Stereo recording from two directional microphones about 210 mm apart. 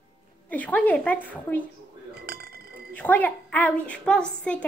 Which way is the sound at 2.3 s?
45° right (ahead or behind).